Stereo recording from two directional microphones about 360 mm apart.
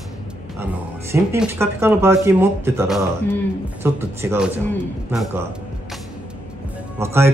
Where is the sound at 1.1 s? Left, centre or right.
Centre.